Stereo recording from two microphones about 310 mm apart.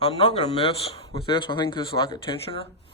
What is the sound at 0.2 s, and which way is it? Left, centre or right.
Speech, centre.